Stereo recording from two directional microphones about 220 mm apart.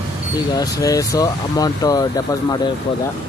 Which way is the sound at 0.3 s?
15° left (ahead or behind).